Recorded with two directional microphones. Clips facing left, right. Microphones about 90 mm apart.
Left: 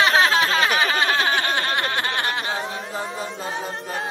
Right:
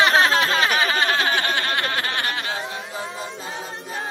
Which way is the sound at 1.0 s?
15° left (ahead or behind).